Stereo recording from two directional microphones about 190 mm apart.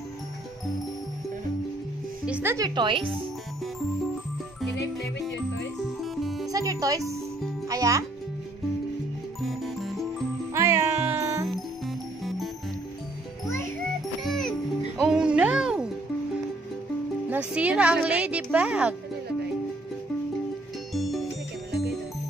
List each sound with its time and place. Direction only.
2.2 s speech: 10° right (ahead or behind); by 3.1 s 25° right (ahead or behind)
6.2 s music: centre (ahead or behind)
6.5 s speech: 15° right (ahead or behind)
9.4 s music: centre (ahead or behind)
10.5 s music: 15° right (ahead or behind)
14.2 s music: centre (ahead or behind)
17.3 s speech: 5° right (ahead or behind)
20.9 s music: centre (ahead or behind)